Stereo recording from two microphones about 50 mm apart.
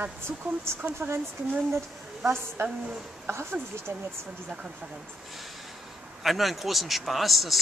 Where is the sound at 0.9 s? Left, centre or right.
Right.